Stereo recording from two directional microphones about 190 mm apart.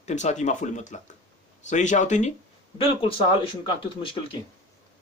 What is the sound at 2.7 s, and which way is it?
Speech, 30° left (ahead or behind).